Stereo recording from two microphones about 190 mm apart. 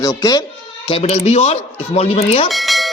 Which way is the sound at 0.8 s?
30° left (ahead or behind).